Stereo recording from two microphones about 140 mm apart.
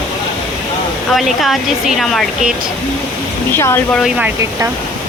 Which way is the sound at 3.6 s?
20° left (ahead or behind).